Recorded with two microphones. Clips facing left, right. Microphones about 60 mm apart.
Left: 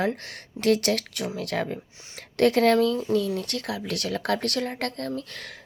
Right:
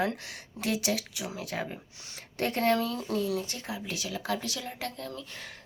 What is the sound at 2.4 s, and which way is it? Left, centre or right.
Speech, left.